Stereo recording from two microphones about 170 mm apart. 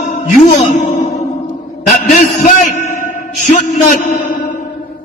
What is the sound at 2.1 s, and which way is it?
A man's voice, 45° left (ahead or behind).